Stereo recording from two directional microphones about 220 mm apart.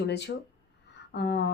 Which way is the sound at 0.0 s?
50° left (ahead or behind).